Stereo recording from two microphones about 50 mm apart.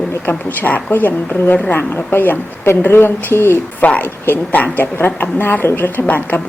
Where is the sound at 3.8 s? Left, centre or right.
Left.